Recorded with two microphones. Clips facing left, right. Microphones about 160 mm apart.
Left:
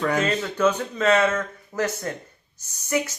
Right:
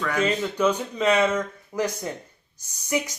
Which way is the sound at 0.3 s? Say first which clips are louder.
Left 1 dB; 10° right (ahead or behind).